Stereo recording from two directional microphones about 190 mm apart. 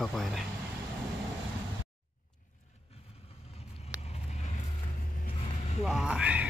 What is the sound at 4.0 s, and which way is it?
Vehicle, 35° left (ahead or behind).